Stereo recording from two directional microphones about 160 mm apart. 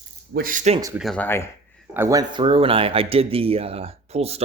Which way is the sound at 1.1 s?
15° left (ahead or behind).